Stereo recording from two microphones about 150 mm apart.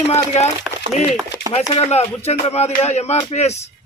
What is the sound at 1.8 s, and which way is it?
A man's voice, 45° left (ahead or behind).